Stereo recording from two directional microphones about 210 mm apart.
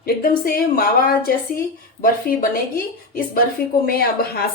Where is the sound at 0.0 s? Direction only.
45° left (ahead or behind).